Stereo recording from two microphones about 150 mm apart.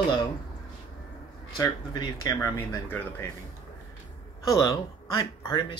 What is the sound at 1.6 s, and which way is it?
Speech, 20° left (ahead or behind).